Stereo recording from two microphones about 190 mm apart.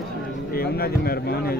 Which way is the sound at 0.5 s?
55° left (ahead or behind).